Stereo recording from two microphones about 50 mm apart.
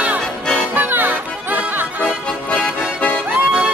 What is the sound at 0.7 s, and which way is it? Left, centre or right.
Music, right.